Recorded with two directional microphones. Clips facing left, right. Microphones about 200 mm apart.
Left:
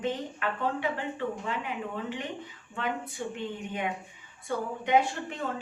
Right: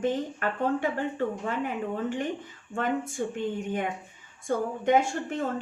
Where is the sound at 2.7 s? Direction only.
45° right (ahead or behind).